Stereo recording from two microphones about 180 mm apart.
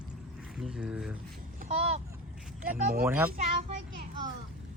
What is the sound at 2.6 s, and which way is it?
Speech, 50° right (ahead or behind).